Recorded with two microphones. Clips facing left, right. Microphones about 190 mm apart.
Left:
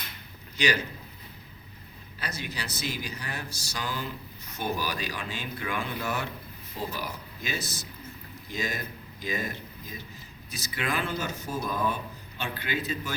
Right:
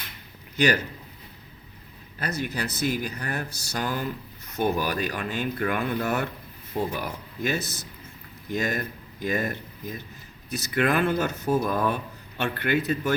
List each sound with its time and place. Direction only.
0.5 s a man's voice: 55° right (ahead or behind)
2.1 s speech: 50° right (ahead or behind)